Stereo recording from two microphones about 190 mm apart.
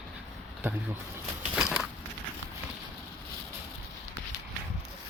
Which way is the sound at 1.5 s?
5° right (ahead or behind).